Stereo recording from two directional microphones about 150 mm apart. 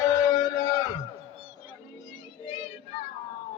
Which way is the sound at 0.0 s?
25° left (ahead or behind).